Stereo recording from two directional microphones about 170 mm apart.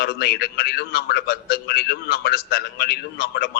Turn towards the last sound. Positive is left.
turn(degrees=70)  # may be behind; listen again after turning